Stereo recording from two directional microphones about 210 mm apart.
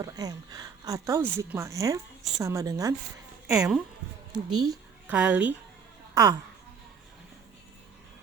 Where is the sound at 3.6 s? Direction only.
5° right (ahead or behind).